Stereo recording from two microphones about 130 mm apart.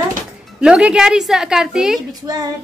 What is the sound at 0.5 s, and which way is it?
Speech, 5° right (ahead or behind).